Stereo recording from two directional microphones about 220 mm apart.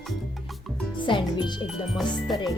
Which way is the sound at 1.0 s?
20° left (ahead or behind).